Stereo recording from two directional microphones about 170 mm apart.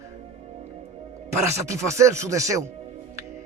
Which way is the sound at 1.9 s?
15° right (ahead or behind).